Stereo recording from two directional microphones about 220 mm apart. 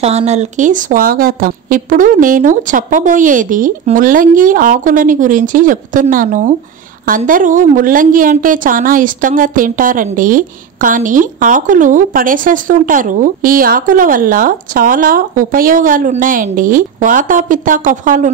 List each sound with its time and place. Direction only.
0.0 s a woman's voice: 30° right (ahead or behind)